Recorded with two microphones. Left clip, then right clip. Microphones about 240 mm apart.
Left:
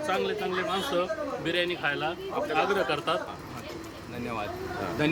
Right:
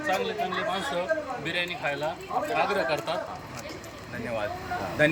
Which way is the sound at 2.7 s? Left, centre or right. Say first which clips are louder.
Even; centre.